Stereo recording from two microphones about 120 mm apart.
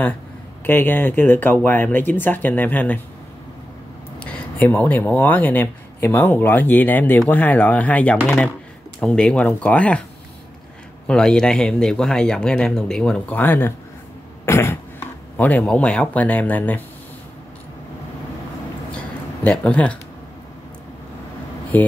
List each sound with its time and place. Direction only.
0.7 s speech: 15° left (ahead or behind)
4.2 s speech: 15° left (ahead or behind)
11.1 s speech: 5° left (ahead or behind)
18.9 s a sound: 10° left (ahead or behind)
21.7 s speech: 15° left (ahead or behind)